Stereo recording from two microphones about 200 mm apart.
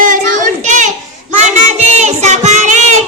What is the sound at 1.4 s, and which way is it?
Child singing, 35° right (ahead or behind).